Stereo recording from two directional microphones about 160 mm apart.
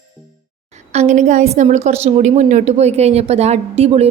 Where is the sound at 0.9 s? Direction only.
45° right (ahead or behind).